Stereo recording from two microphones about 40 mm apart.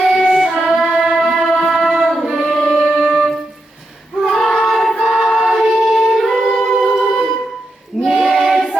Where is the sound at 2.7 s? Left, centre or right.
Centre.